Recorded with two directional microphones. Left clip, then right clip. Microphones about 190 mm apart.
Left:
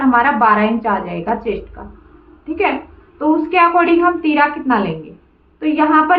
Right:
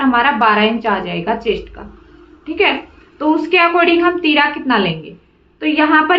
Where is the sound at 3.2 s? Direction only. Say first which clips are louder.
Even; 25° right (ahead or behind).